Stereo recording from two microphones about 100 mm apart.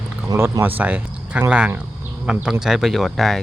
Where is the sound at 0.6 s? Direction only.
15° right (ahead or behind); by 3.4 s centre (ahead or behind).